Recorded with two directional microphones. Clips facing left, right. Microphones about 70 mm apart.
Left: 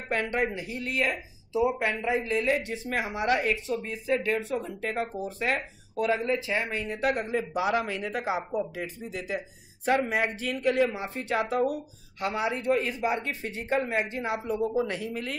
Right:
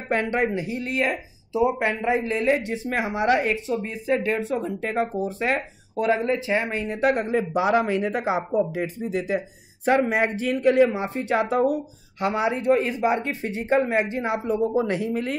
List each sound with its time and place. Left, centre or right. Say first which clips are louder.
0.1 s speech: right 5 dB; right